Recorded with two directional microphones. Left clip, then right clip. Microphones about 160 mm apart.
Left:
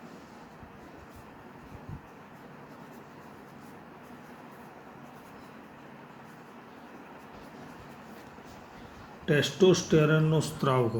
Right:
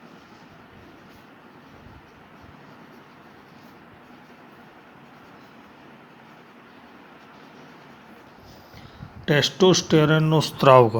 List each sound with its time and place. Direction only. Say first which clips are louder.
9.2 s speech: right 5 dB; 85° right